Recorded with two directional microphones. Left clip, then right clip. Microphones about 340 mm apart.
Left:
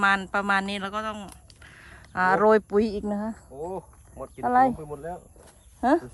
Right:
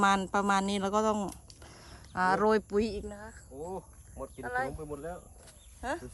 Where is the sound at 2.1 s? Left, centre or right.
Centre.